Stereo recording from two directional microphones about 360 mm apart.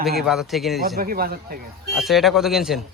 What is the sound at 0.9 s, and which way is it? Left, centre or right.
Speech, right.